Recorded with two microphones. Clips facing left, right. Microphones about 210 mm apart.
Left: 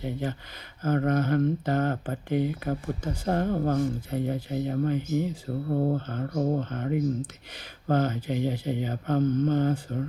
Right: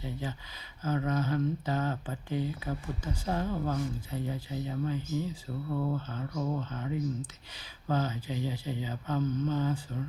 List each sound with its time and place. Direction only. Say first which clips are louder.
0.0 s speech: left 7 dB; 60° left (ahead or behind)